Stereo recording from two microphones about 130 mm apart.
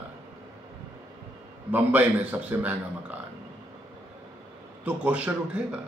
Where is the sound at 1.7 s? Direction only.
15° right (ahead or behind).